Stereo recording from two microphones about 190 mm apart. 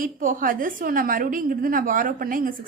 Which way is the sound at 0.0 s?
45° right (ahead or behind).